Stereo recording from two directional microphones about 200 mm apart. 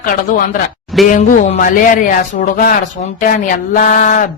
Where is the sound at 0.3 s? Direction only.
40° left (ahead or behind).